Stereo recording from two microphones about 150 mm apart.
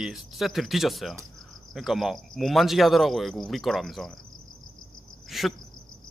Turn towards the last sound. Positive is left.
turn(degrees=0)  # may be behind; listen again after turning